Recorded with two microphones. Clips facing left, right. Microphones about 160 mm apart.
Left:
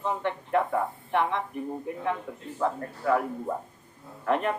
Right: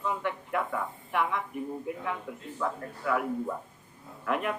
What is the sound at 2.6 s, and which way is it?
A man's voice, 40° left (ahead or behind).